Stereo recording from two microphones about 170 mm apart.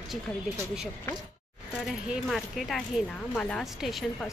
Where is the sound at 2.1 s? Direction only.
Centre (ahead or behind).